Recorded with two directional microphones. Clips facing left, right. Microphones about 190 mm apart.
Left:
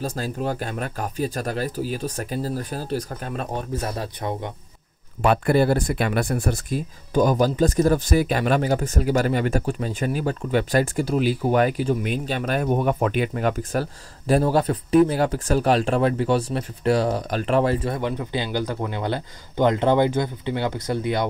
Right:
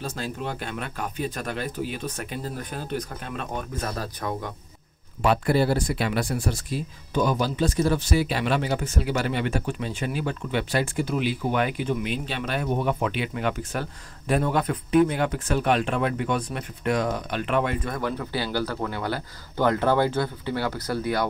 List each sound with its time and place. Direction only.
0.0 s speech: 40° left (ahead or behind)
5.2 s speech: 50° left (ahead or behind); by 21.3 s 20° left (ahead or behind)